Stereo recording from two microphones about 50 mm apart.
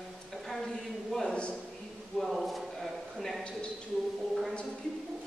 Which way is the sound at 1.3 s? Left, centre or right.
Centre.